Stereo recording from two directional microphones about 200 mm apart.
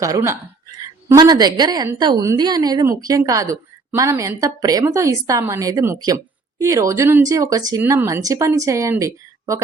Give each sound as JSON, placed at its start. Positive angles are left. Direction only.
{"t": 0.0, "sound": "a woman's voice", "side_deg": -15}